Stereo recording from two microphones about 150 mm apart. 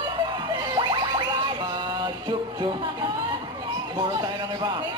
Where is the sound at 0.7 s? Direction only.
30° right (ahead or behind).